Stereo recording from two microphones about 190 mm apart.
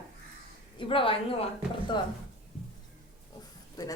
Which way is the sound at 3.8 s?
15° left (ahead or behind).